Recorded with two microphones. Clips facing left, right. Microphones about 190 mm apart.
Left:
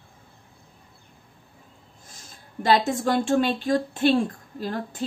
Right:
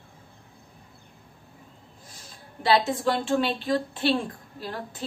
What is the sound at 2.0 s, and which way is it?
Speech, 45° left (ahead or behind).